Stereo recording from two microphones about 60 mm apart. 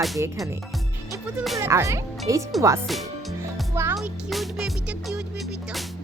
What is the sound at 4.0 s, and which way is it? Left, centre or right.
Music, centre.